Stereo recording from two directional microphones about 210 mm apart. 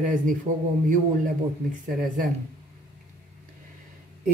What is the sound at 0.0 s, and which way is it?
Speech, 40° right (ahead or behind).